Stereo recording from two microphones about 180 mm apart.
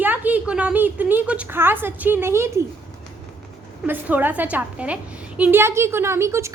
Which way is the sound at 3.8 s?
10° right (ahead or behind).